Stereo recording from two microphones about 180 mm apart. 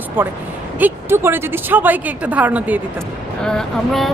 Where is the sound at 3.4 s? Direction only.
Centre (ahead or behind).